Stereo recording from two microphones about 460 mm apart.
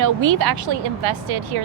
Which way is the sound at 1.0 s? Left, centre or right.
Right.